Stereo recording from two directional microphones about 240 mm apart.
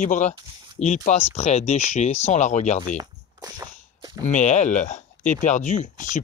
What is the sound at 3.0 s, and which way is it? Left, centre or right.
Walk, centre.